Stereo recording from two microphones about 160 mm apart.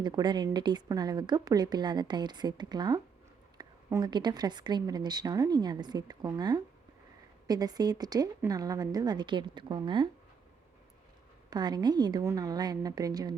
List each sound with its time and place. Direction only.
0.0 s speech: 25° right (ahead or behind)
11.5 s speech: 25° right (ahead or behind)